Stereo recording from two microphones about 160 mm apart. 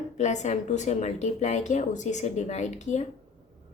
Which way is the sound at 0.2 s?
45° left (ahead or behind).